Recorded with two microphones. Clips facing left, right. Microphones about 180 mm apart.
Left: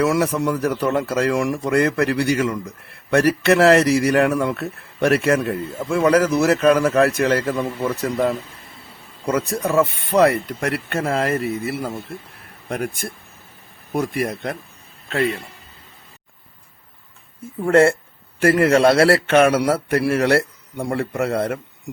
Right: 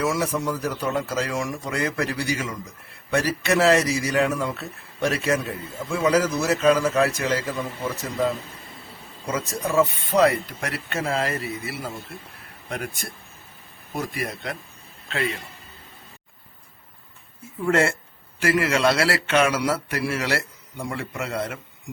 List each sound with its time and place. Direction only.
0.0 s speech: 65° left (ahead or behind); by 15.4 s 40° left (ahead or behind)
17.7 s speech: 55° left (ahead or behind)